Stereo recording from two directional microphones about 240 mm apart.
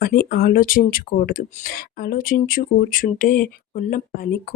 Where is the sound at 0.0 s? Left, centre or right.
Left.